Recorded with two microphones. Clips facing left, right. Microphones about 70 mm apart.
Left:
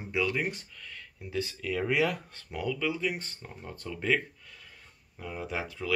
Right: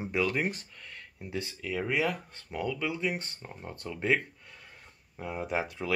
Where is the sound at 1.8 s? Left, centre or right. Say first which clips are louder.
Left 2 dB; centre; by 5.9 s right.